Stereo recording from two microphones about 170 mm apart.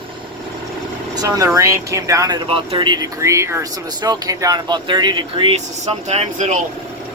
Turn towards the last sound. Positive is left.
turn(degrees=-45)  # may be behind; listen again after turning